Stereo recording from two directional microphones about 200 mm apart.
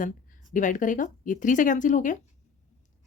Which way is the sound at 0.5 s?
40° left (ahead or behind).